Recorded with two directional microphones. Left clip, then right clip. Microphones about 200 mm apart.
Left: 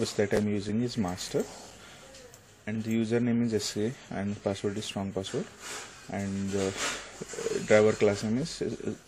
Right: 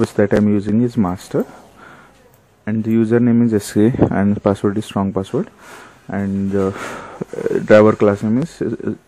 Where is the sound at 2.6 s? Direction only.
40° right (ahead or behind).